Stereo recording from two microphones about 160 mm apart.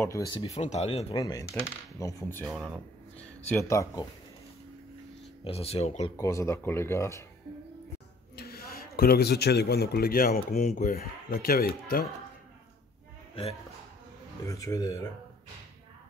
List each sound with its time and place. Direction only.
0.0 s speech: 20° left (ahead or behind)
0.3 s speech: 35° left (ahead or behind)
1.1 s speech: 20° left (ahead or behind)
2.4 s speech: centre (ahead or behind)
3.2 s a sound: 10° left (ahead or behind)
3.6 s speech: 20° left (ahead or behind)
5.4 s speech: 40° left (ahead or behind)
6.1 s speech: 20° left (ahead or behind)
8.4 s speech: 70° left (ahead or behind)
13.3 s a man's voice: 35° left (ahead or behind)
14.4 s speech: 20° left (ahead or behind)